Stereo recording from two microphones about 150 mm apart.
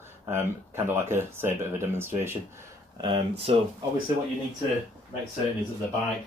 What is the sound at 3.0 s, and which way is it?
Speech, 35° right (ahead or behind).